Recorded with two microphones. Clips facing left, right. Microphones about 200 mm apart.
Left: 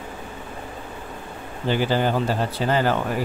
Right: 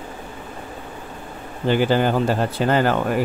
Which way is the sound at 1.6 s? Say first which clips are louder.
Right 3 dB; 50° right (ahead or behind).